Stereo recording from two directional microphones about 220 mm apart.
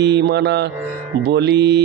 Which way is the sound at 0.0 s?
50° right (ahead or behind).